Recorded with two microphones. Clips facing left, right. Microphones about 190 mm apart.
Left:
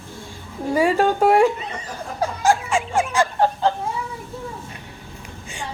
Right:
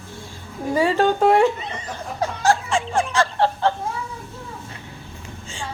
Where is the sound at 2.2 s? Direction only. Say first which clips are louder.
Left 1 dB; 10° left (ahead or behind).